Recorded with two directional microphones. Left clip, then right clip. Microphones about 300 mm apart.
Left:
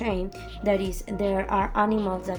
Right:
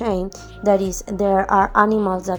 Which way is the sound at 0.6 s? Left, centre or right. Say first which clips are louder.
Right 8 dB; centre.